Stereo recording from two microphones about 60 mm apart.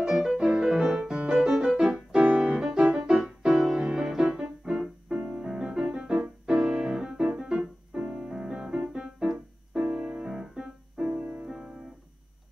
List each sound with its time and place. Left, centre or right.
0.0 s music: centre
6.4 s piano: centre
9.3 s keyboard: centre
11.4 s music: centre